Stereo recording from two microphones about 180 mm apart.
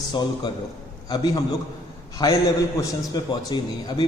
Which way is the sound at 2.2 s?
20° left (ahead or behind).